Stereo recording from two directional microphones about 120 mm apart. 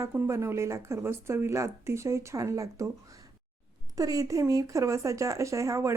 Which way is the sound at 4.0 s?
30° right (ahead or behind).